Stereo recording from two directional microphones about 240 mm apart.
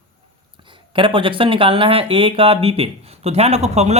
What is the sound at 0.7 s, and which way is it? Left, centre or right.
Speech, right.